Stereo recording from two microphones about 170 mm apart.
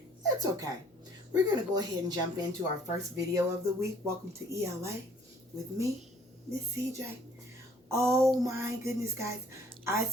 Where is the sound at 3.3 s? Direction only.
15° right (ahead or behind).